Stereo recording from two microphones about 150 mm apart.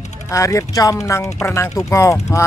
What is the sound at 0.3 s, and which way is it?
Speech, 20° left (ahead or behind).